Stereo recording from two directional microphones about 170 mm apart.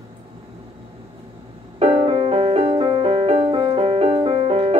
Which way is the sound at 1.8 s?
30° right (ahead or behind).